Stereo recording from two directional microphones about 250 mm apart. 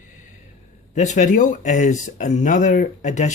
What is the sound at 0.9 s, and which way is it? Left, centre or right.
Speech, left.